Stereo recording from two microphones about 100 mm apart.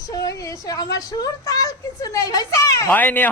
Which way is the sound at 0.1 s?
35° left (ahead or behind).